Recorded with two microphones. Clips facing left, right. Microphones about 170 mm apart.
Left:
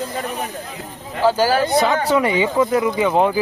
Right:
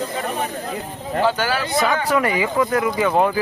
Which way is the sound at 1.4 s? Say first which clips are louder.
Left 6 dB; 40° left (ahead or behind).